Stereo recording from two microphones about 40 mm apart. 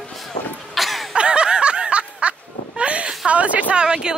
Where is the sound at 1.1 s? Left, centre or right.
Right.